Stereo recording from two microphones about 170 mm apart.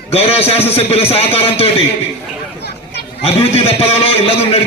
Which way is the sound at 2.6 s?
70° left (ahead or behind).